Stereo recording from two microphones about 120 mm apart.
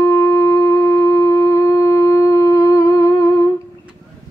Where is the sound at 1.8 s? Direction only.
25° left (ahead or behind).